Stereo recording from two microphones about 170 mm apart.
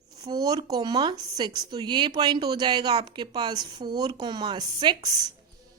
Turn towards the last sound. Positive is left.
turn(degrees=-25)  # may be behind; listen again after turning